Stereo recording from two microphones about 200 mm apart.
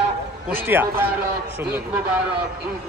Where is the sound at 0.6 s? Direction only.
10° right (ahead or behind).